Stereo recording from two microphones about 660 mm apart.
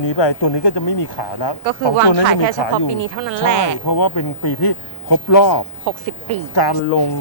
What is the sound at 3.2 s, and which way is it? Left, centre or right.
Speech, right.